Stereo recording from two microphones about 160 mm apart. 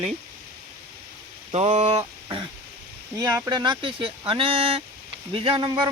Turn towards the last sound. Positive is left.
turn(degrees=-30)  # may be behind; listen again after turning